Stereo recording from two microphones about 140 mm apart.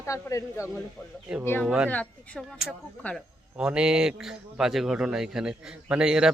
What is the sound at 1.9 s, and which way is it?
Speech, 10° left (ahead or behind).